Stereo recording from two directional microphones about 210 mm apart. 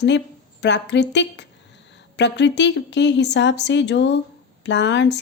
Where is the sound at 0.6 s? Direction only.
55° left (ahead or behind).